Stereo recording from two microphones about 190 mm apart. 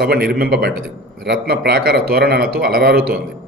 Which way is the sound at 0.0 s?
55° right (ahead or behind).